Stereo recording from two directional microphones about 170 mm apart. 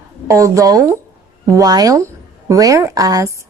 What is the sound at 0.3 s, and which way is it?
A woman's voice, 20° right (ahead or behind).